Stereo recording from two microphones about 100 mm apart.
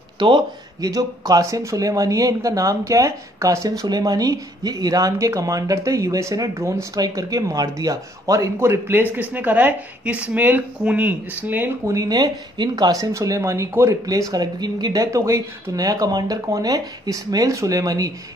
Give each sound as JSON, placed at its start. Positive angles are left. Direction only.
{"t": 0.2, "sound": "speech", "side_deg": -45}
{"t": 8.5, "sound": "a man's voice", "side_deg": -25}
{"t": 11.8, "sound": "speech", "side_deg": -35}